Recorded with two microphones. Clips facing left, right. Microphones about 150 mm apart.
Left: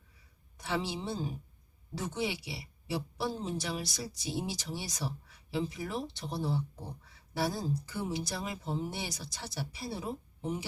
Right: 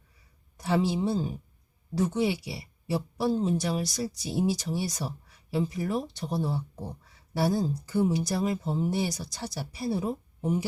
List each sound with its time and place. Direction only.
0.6 s speech: 45° right (ahead or behind)